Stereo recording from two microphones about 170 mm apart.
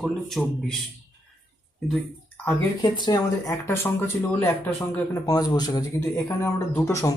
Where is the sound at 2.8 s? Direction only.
25° left (ahead or behind).